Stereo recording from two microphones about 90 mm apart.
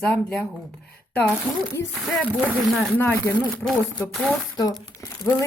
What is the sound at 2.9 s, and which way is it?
Speech, 20° left (ahead or behind).